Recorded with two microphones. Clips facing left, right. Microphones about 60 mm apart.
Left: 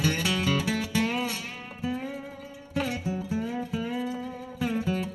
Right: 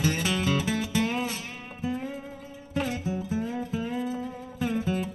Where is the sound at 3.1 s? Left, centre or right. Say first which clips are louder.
Even; left.